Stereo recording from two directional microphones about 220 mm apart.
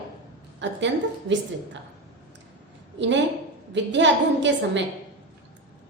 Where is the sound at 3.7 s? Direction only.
55° right (ahead or behind).